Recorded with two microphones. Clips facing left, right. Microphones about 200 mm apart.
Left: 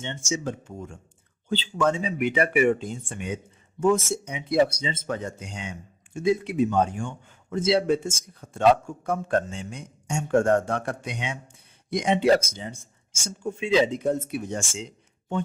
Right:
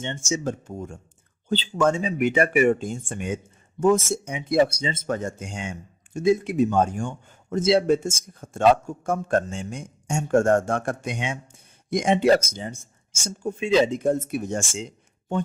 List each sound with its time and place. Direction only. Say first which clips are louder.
0.0 s a man's voice: right 2 dB; 45° right (ahead or behind)